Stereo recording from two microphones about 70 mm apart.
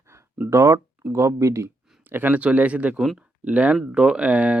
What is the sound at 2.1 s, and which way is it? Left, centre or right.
Speech, right.